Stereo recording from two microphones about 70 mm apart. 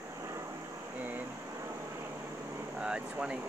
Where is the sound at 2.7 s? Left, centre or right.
Centre.